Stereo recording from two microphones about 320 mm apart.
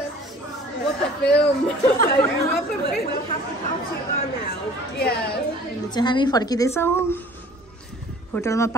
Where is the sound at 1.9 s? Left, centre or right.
Left.